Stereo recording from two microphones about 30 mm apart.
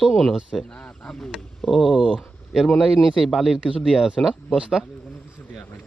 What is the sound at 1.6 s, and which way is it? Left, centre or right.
Speech, centre.